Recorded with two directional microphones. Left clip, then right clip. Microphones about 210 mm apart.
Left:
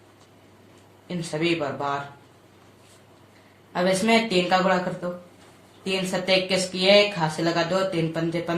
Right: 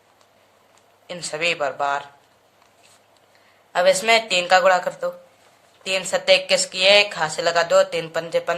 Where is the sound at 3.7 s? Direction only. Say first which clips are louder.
Right 5 dB; 35° right (ahead or behind).